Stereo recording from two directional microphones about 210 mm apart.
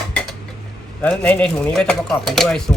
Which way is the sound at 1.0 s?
5° left (ahead or behind).